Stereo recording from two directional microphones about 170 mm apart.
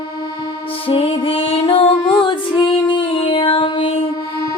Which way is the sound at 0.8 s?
35° left (ahead or behind).